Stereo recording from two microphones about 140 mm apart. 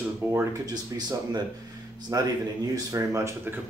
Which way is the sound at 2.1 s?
25° right (ahead or behind).